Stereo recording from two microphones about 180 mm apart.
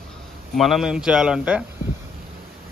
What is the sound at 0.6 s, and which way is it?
A man's voice, centre (ahead or behind).